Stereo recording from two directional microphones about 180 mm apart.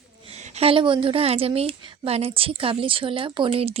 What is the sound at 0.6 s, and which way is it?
A woman's voice, 30° right (ahead or behind).